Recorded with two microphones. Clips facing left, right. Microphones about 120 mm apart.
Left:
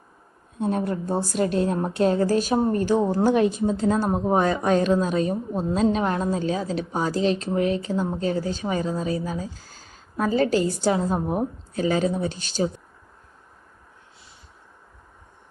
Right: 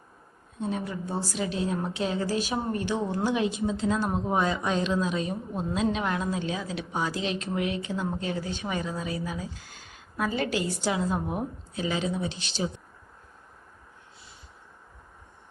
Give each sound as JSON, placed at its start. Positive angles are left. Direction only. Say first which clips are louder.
{"t": 0.6, "sound": "a woman's voice", "louder": "left 7 dB", "side_deg": 50}